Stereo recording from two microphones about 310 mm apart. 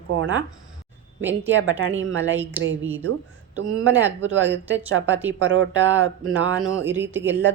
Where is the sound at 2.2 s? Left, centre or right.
Centre.